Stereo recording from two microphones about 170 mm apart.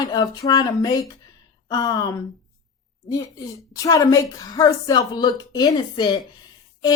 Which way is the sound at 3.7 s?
20° left (ahead or behind).